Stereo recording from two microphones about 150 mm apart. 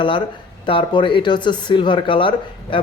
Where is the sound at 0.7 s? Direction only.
35° left (ahead or behind).